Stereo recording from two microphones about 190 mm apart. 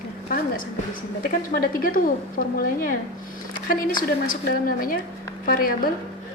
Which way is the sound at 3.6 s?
45° left (ahead or behind).